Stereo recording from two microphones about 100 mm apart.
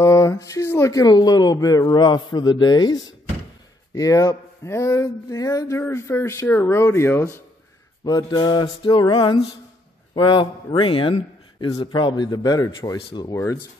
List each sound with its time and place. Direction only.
0.0 s speech: 35° left (ahead or behind)
8.0 s a man's voice: 40° left (ahead or behind)
8.6 s music: 55° left (ahead or behind)
9.0 s a man's voice: 50° left (ahead or behind)